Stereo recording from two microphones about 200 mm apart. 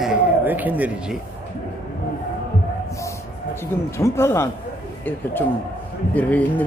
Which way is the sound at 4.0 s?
15° left (ahead or behind).